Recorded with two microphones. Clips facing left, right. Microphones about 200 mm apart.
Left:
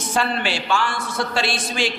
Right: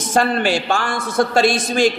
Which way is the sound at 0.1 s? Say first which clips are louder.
Right 6 dB; 45° right (ahead or behind).